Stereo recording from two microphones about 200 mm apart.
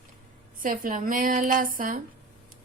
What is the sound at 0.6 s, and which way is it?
A woman's voice, 40° right (ahead or behind).